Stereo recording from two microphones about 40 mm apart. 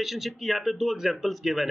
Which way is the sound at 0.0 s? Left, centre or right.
Centre.